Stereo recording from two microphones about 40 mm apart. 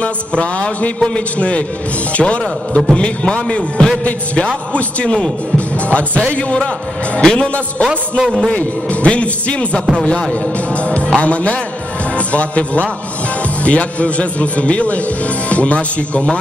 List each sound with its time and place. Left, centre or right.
0.0 s a man's voice: left
0.9 s a man's voice: centre
2.1 s a man's voice: left
6.3 s a man's voice: left
8.2 s a man's voice: centre
8.5 s a man's voice: left